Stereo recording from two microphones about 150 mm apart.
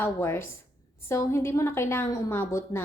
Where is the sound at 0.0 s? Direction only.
15° left (ahead or behind).